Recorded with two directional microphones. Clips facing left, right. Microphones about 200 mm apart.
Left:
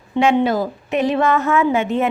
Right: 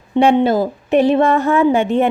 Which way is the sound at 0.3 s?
25° right (ahead or behind).